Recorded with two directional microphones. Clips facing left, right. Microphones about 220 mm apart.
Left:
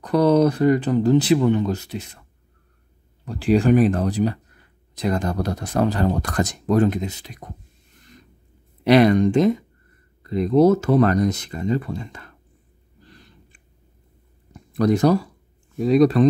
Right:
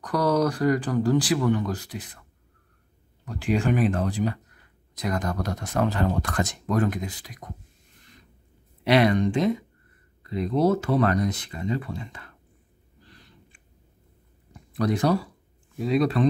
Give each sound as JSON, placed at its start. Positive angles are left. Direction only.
{"t": 0.0, "sound": "speech", "side_deg": 25}
{"t": 3.3, "sound": "speech", "side_deg": 35}
{"t": 8.8, "sound": "speech", "side_deg": 40}
{"t": 14.8, "sound": "speech", "side_deg": 45}